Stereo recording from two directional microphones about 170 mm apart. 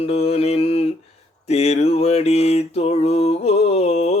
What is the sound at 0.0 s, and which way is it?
Mantra, 35° left (ahead or behind).